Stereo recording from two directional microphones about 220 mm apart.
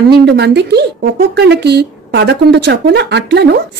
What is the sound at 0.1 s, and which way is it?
A woman's voice, 50° right (ahead or behind).